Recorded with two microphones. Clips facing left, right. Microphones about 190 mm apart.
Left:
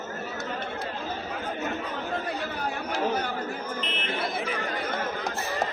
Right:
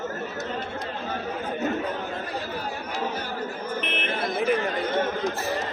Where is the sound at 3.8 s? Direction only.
60° right (ahead or behind).